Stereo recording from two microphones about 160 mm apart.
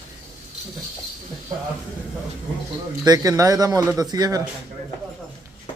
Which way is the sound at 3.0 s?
25° right (ahead or behind).